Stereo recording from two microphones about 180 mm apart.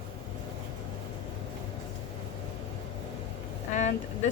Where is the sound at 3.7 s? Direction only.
40° left (ahead or behind).